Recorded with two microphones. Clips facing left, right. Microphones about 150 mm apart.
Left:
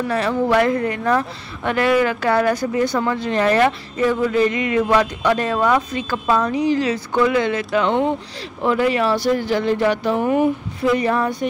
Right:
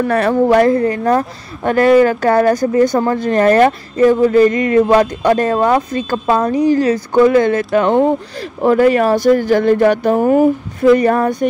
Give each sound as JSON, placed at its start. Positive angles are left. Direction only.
{"t": 0.0, "sound": "speech", "side_deg": -55}